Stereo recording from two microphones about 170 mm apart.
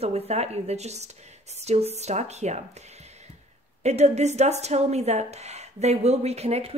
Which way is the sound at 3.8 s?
40° right (ahead or behind).